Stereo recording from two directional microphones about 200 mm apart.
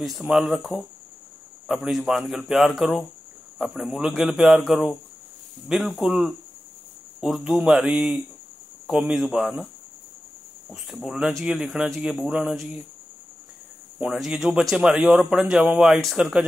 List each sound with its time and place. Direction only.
0.0 s speech: centre (ahead or behind)
11.1 s speech: centre (ahead or behind)
13.9 s speech: 5° right (ahead or behind)